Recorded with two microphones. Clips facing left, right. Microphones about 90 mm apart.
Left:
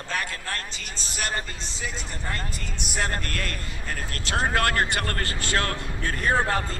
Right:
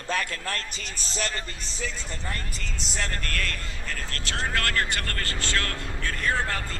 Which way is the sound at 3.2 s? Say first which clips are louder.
Even; 25° left (ahead or behind).